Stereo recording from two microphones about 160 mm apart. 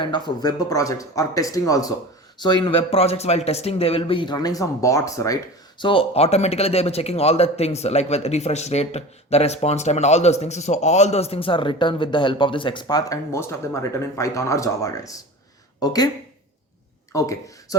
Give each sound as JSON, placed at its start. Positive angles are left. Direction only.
{"t": 0.0, "sound": "a man's voice", "side_deg": 30}
{"t": 5.8, "sound": "a man's voice", "side_deg": 35}
{"t": 17.1, "sound": "speech", "side_deg": 20}